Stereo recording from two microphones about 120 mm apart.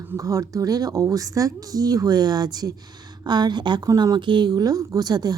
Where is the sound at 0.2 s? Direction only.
30° right (ahead or behind).